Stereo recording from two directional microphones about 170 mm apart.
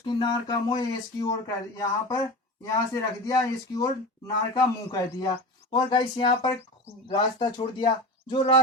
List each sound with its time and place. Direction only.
0.0 s speech: 25° left (ahead or behind)